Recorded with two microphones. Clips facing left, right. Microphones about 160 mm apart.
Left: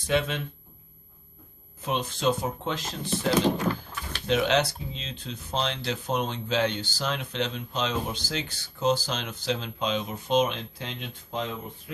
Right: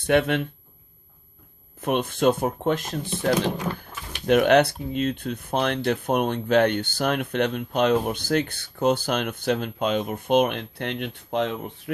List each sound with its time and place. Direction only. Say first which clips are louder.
0.0 s speech: right 6 dB; 60° right (ahead or behind)
1.8 s speech: right 6 dB; 55° right (ahead or behind)